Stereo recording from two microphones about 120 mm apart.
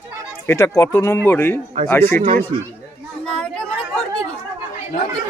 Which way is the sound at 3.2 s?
5° left (ahead or behind).